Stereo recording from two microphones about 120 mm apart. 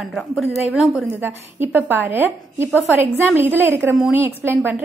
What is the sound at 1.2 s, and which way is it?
A woman's voice, 20° right (ahead or behind).